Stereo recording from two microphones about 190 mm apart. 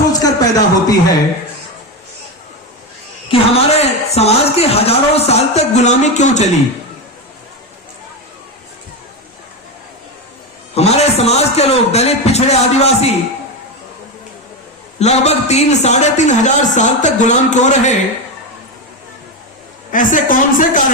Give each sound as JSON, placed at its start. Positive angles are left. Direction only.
{"t": 0.1, "sound": "a sound", "side_deg": 20}
{"t": 3.2, "sound": "a woman's voice", "side_deg": 35}
{"t": 10.8, "sound": "a woman's voice", "side_deg": 35}
{"t": 14.9, "sound": "a woman's voice", "side_deg": 35}
{"t": 19.9, "sound": "a woman's voice", "side_deg": 45}